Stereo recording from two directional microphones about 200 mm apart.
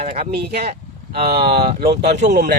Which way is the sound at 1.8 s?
50° right (ahead or behind).